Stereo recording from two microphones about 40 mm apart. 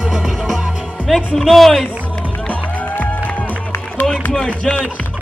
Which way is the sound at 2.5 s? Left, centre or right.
Left.